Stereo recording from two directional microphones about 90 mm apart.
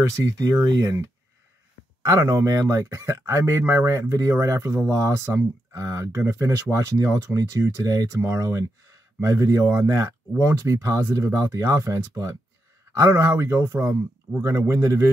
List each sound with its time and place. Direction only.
0.2 s speech: 40° right (ahead or behind)
2.0 s speech: 35° right (ahead or behind)